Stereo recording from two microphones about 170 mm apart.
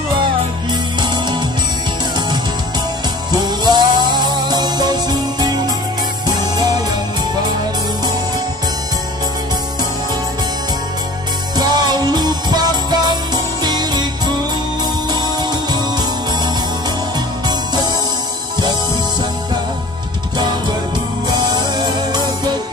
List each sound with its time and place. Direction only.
3.4 s music: 25° right (ahead or behind)
11.5 s music: 25° right (ahead or behind)
21.4 s music: 25° right (ahead or behind)